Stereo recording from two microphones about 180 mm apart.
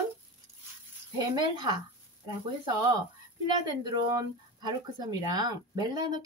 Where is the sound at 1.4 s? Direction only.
25° right (ahead or behind).